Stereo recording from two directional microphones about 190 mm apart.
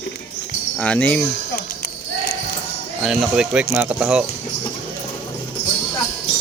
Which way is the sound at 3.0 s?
5° right (ahead or behind).